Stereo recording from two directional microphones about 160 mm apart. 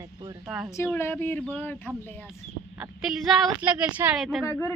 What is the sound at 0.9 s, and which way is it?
Speech, 15° left (ahead or behind).